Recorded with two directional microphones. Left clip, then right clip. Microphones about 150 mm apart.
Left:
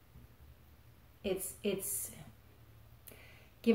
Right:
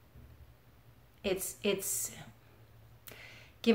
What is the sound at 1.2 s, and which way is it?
A woman's voice, 20° left (ahead or behind).